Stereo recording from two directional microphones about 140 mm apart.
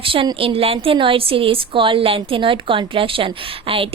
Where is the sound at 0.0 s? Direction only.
40° right (ahead or behind).